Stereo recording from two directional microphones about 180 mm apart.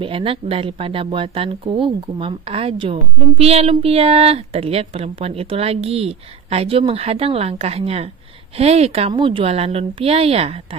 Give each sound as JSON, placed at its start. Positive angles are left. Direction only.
{"t": 0.0, "sound": "speech", "side_deg": -30}